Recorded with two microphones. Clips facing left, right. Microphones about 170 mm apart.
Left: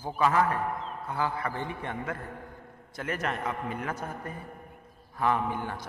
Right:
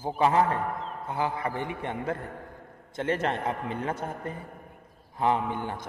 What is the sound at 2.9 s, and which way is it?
A man's voice, 25° right (ahead or behind).